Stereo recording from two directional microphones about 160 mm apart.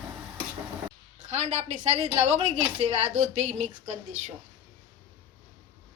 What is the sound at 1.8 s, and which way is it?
A woman's voice, 40° right (ahead or behind).